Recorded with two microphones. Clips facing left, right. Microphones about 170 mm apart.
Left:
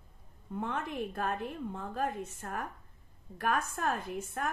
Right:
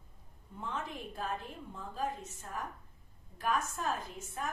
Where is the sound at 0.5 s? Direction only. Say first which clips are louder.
Left 5 dB; 60° left (ahead or behind).